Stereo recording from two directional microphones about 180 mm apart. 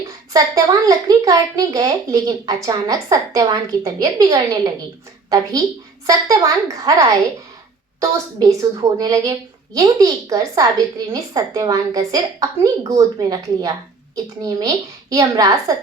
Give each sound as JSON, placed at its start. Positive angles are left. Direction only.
{"t": 0.0, "sound": "a child's voice", "side_deg": -20}
{"t": 8.0, "sound": "a child's voice", "side_deg": -20}